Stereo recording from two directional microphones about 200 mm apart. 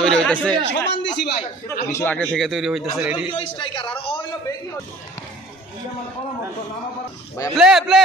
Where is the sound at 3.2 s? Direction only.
25° left (ahead or behind).